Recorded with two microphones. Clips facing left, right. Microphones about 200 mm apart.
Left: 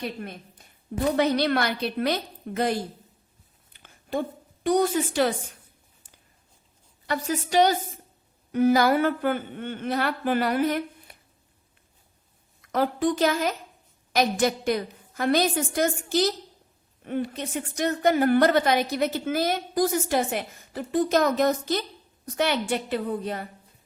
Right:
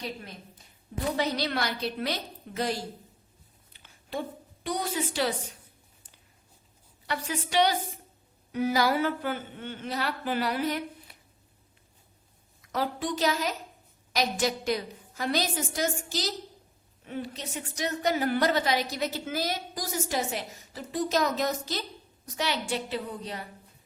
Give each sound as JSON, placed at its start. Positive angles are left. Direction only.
{"t": 0.0, "sound": "a woman's voice", "side_deg": 55}
{"t": 3.7, "sound": "a sound", "side_deg": 50}
{"t": 7.1, "sound": "speech", "side_deg": 45}
{"t": 12.6, "sound": "a woman's voice", "side_deg": 55}